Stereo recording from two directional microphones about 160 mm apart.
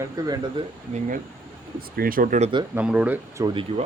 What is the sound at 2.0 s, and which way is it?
Speech, 60° right (ahead or behind).